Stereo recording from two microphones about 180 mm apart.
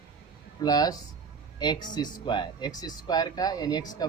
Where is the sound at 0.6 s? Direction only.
20° left (ahead or behind).